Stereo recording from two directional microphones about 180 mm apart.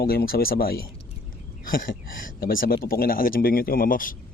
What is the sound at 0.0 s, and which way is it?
Speech, 55° left (ahead or behind).